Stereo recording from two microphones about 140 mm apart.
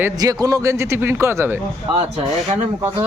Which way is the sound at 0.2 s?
25° right (ahead or behind).